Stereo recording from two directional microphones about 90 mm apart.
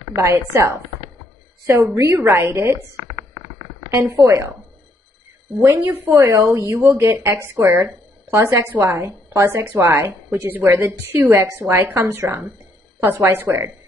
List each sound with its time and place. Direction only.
0.2 s a woman's voice: 25° right (ahead or behind)
2.0 s a woman's voice: 30° right (ahead or behind)
3.9 s a woman's voice: 25° right (ahead or behind)
5.8 s a woman's voice: 20° right (ahead or behind)